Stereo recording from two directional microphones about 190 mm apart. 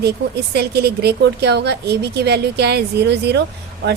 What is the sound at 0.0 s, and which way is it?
A woman's voice, 60° right (ahead or behind).